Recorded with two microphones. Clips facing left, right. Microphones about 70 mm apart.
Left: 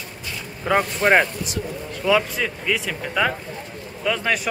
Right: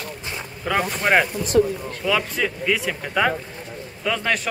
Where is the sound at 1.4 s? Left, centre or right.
Right.